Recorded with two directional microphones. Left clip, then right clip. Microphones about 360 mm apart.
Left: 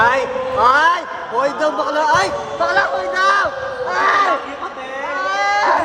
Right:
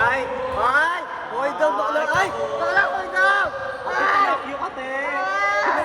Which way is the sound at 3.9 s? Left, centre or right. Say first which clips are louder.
Left 4 dB; left.